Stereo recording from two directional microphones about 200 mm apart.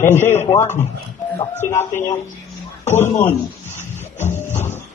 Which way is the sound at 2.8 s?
10° left (ahead or behind).